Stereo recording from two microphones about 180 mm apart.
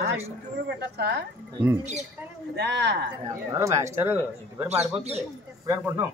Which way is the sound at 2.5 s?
75° right (ahead or behind).